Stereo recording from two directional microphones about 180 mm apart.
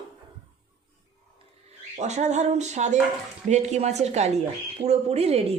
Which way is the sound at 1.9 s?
40° right (ahead or behind).